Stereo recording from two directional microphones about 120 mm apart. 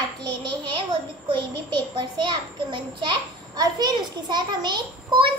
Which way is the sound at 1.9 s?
40° right (ahead or behind).